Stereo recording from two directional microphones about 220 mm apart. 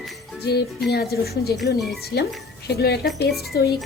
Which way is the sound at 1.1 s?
45° left (ahead or behind).